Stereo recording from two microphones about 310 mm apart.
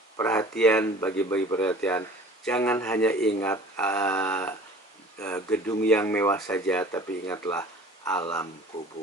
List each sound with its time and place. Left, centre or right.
0.2 s speech: centre